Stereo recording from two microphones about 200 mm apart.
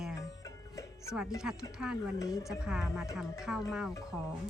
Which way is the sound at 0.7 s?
15° left (ahead or behind).